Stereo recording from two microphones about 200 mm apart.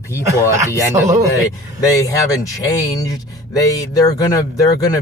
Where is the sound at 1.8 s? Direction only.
15° left (ahead or behind).